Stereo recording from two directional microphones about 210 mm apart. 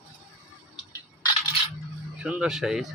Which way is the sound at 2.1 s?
5° right (ahead or behind).